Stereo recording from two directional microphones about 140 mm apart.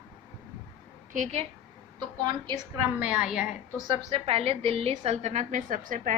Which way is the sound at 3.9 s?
40° right (ahead or behind).